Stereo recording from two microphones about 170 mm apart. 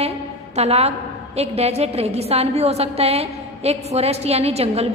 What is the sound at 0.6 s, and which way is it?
A woman's voice, 40° right (ahead or behind).